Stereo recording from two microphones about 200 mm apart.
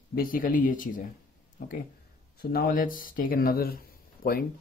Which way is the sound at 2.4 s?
50° left (ahead or behind).